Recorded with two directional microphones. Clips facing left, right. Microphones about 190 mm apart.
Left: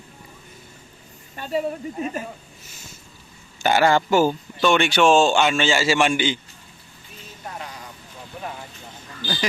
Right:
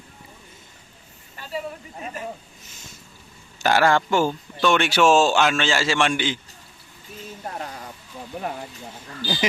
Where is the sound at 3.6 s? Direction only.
Centre (ahead or behind).